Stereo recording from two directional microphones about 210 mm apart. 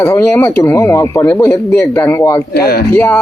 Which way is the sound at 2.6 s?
50° left (ahead or behind).